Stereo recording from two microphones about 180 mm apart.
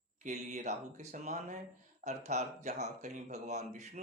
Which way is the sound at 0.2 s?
40° right (ahead or behind).